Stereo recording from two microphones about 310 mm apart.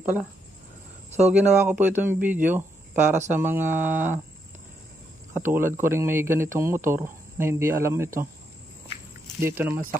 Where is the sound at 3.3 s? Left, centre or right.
Centre.